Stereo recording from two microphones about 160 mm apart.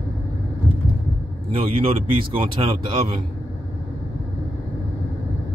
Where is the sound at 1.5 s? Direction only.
35° right (ahead or behind).